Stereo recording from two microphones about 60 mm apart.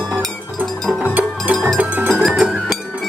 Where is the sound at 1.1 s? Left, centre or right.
Right.